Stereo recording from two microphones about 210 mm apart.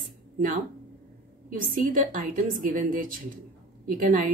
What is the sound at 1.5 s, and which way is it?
A woman's voice, 40° right (ahead or behind).